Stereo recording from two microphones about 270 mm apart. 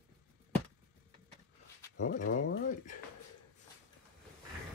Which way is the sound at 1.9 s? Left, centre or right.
Left.